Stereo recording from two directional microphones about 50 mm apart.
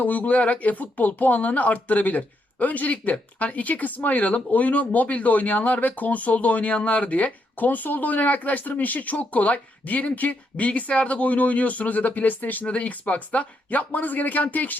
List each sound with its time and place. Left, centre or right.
0.0 s speech: left